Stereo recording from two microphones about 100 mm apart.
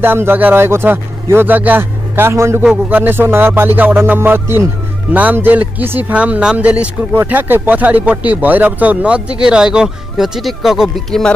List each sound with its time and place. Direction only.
0.0 s speech: 20° right (ahead or behind); by 11.3 s 5° left (ahead or behind)